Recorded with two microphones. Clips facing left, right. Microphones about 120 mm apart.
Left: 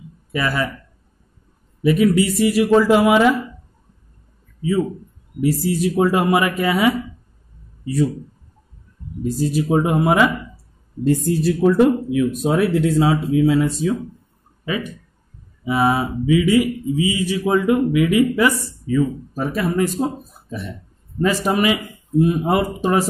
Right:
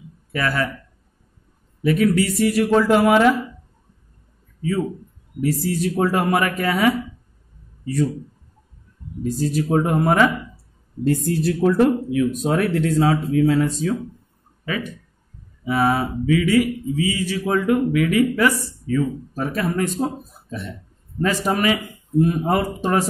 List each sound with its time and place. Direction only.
0.3 s speech: 15° left (ahead or behind)
1.8 s speech: 10° left (ahead or behind)
4.6 s speech: 10° left (ahead or behind)
9.5 s speech: 10° left (ahead or behind)